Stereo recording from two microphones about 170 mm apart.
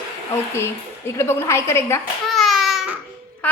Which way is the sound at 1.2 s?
15° left (ahead or behind).